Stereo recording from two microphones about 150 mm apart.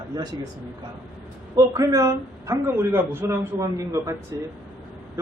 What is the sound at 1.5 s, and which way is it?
A man's voice, 20° right (ahead or behind).